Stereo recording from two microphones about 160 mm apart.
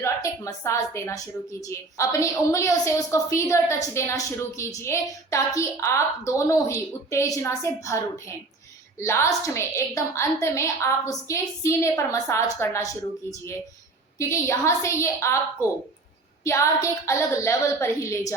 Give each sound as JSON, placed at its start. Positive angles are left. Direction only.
{"t": 0.0, "sound": "a woman's voice", "side_deg": 20}
{"t": 9.0, "sound": "a woman's voice", "side_deg": 15}
{"t": 14.2, "sound": "a woman's voice", "side_deg": 15}
{"t": 16.4, "sound": "a woman's voice", "side_deg": 20}